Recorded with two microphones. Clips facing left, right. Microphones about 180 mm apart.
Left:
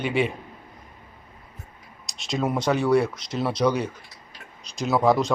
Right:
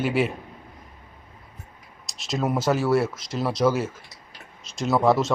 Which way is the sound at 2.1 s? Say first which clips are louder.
Even; centre (ahead or behind).